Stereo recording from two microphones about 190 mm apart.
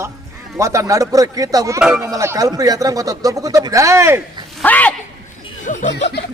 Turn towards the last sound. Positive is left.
turn(degrees=40)  # may be behind; listen again after turning